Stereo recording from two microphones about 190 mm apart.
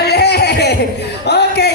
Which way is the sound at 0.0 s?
60° left (ahead or behind).